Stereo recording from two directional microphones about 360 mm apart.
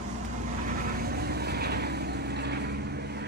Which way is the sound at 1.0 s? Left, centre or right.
Right.